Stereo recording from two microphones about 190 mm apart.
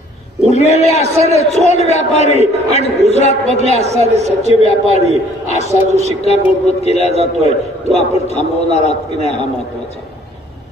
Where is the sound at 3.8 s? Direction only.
35° right (ahead or behind).